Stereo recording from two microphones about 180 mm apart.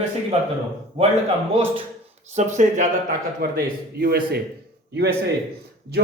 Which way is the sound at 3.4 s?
55° right (ahead or behind).